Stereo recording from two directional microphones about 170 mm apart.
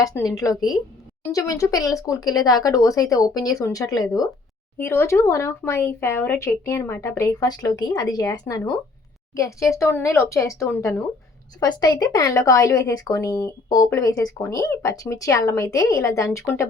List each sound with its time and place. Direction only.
0.0 s speech: 20° left (ahead or behind)